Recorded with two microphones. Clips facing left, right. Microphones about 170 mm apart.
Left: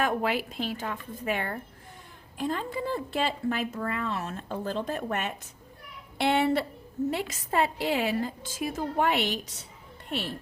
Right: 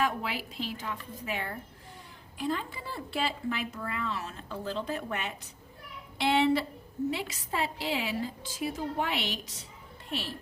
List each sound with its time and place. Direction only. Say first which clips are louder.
0.0 s a woman's voice: left 4 dB; 55° left (ahead or behind)
2.4 s speech: left 3 dB; 45° left (ahead or behind)